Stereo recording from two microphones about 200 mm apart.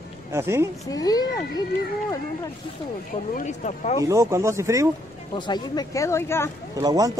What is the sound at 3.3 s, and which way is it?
Speech, 35° left (ahead or behind).